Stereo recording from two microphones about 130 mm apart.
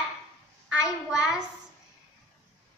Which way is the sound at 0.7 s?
5° right (ahead or behind).